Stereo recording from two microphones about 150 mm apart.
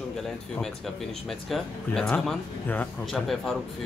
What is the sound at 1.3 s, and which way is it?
Speech, centre (ahead or behind).